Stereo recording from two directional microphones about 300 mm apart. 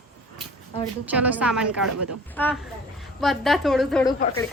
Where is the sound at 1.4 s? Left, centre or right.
Centre.